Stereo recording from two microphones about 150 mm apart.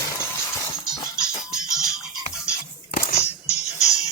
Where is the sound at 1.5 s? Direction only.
5° right (ahead or behind).